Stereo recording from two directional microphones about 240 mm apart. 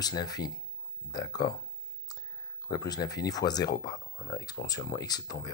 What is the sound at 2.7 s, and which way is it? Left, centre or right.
Speech, centre.